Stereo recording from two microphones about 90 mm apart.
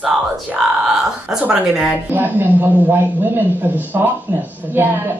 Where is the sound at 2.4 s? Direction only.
20° right (ahead or behind).